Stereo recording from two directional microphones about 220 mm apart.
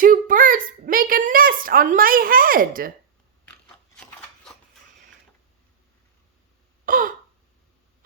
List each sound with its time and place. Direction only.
0.0 s a woman's voice: 40° right (ahead or behind)
6.8 s gasp: 40° right (ahead or behind)